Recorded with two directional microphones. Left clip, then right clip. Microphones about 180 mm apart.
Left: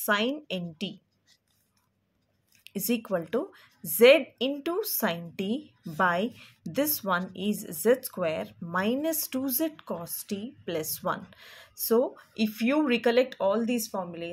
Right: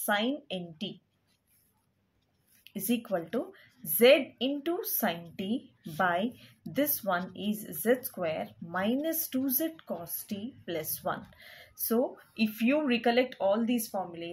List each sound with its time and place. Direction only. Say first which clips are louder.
0.0 s speech: left 3 dB; 40° left (ahead or behind)
2.6 s speech: left 3 dB; 35° left (ahead or behind)